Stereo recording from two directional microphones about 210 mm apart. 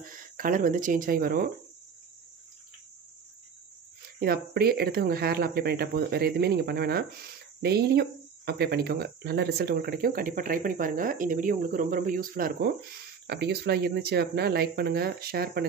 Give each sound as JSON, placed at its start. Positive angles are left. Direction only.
{"t": 0.0, "sound": "speech", "side_deg": -40}
{"t": 4.2, "sound": "speech", "side_deg": -45}